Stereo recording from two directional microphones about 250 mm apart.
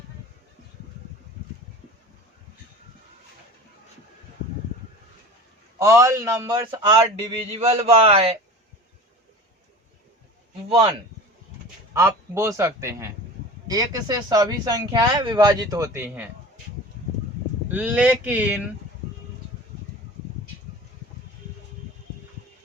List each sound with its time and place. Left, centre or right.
5.8 s speech: centre
11.9 s speech: centre
17.7 s speech: centre